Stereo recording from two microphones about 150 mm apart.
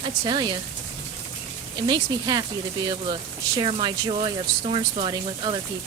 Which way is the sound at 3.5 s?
30° right (ahead or behind).